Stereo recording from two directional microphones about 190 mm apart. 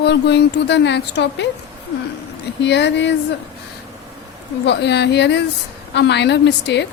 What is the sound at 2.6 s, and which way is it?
Speech, 65° left (ahead or behind).